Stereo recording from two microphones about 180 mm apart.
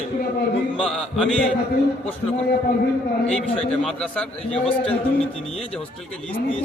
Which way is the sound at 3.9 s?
5° left (ahead or behind).